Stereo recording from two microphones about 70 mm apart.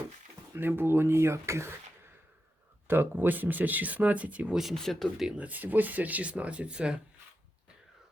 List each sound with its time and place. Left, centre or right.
0.5 s speech: right
4.7 s speech: centre
5.4 s speech: right